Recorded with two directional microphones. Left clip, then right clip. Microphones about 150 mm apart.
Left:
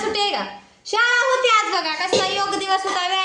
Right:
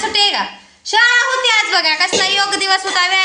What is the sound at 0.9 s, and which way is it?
A woman's voice, 5° right (ahead or behind).